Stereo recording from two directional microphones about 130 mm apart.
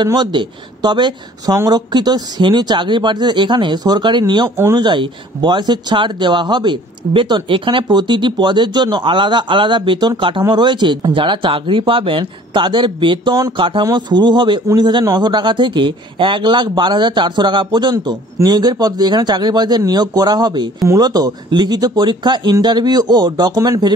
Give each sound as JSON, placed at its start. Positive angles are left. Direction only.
{"t": 0.0, "sound": "speech", "side_deg": -35}